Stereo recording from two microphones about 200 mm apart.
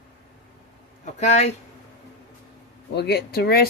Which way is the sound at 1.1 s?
35° left (ahead or behind).